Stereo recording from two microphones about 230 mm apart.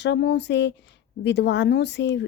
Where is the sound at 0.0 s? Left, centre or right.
Left.